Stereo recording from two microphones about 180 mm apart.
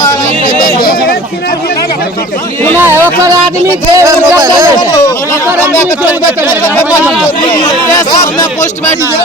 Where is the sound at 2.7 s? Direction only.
10° right (ahead or behind).